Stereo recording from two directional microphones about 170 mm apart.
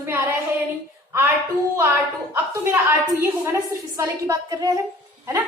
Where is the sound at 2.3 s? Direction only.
15° right (ahead or behind).